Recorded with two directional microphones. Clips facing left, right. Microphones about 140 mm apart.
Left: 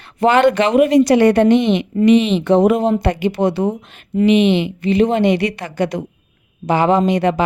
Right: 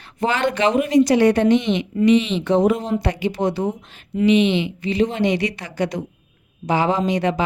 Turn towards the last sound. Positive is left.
turn(degrees=60)  # may be behind; listen again after turning